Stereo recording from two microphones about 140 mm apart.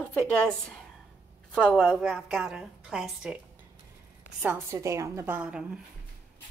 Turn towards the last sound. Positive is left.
turn(degrees=-5)  # may be behind; listen again after turning